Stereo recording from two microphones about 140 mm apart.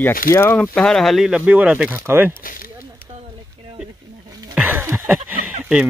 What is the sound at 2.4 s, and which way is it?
Speech, 90° left.